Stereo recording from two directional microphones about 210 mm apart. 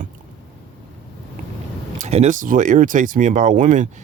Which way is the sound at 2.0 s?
30° right (ahead or behind).